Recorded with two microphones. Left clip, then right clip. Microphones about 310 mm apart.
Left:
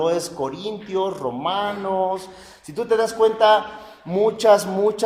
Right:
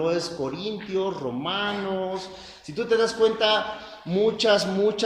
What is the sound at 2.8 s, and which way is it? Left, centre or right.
A man's voice, left.